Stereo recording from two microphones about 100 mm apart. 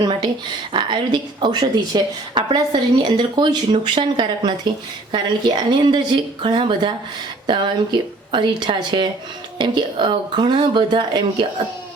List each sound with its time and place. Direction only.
0.7 s a woman's voice: 55° right (ahead or behind)